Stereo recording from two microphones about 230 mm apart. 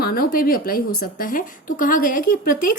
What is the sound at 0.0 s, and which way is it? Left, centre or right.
A woman's voice, left.